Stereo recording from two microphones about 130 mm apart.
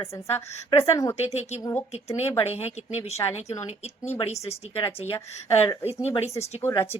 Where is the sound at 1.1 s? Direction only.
55° left (ahead or behind).